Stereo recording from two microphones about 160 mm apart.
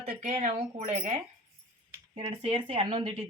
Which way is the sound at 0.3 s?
45° right (ahead or behind).